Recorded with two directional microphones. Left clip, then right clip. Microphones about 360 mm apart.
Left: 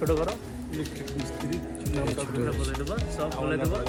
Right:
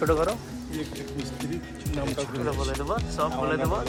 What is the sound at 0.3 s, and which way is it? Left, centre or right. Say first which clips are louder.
Speech: right 3 dB; centre.